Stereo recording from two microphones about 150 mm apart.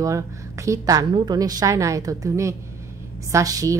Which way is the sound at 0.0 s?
20° right (ahead or behind).